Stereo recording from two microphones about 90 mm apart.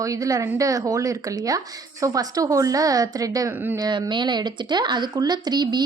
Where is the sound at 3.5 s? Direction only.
20° right (ahead or behind).